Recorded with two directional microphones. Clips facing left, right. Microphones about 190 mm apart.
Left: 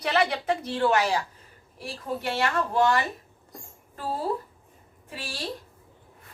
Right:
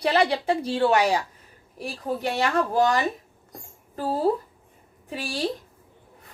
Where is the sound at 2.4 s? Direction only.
40° right (ahead or behind).